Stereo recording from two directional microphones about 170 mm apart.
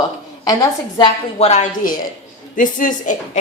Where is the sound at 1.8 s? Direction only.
55° left (ahead or behind).